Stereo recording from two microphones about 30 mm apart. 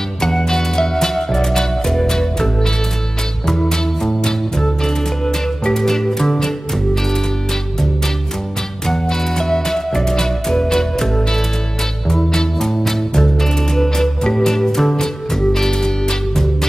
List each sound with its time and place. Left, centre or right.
0.2 s music: centre
8.8 s music: centre
12.1 s music: centre